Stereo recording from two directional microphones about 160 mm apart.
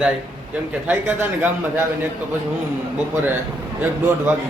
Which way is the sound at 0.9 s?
10° right (ahead or behind).